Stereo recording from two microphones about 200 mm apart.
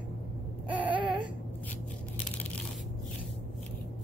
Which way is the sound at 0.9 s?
25° right (ahead or behind).